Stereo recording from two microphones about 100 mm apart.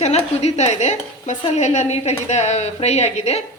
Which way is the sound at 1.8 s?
90° left.